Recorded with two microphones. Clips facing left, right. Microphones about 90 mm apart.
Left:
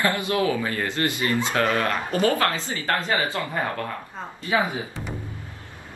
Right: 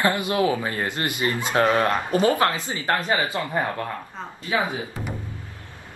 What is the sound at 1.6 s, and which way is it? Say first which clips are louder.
Speech: right 6 dB; 30° right (ahead or behind).